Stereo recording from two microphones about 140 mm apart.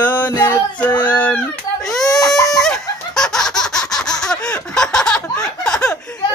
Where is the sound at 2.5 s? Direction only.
5° left (ahead or behind).